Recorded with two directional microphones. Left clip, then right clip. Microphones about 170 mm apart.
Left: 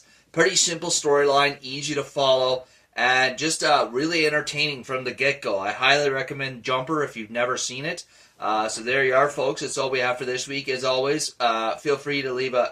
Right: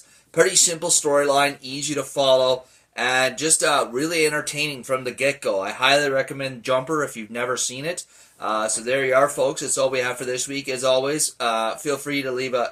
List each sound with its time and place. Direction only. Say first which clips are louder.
0.3 s speech: right 2 dB; 20° right (ahead or behind)